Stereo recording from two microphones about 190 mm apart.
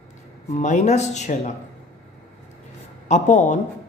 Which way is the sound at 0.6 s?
40° left (ahead or behind).